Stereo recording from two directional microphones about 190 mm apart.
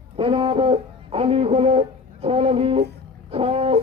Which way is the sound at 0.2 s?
30° right (ahead or behind).